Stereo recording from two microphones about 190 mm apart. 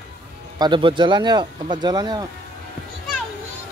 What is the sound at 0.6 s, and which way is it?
Speech, 25° right (ahead or behind).